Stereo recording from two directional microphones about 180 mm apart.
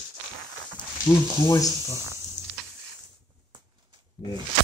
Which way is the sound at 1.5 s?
20° left (ahead or behind).